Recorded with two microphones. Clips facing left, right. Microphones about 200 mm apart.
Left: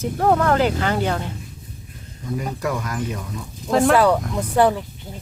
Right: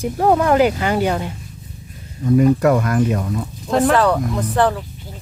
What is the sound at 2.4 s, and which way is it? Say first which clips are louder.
Speech: right 12 dB; 60° right (ahead or behind).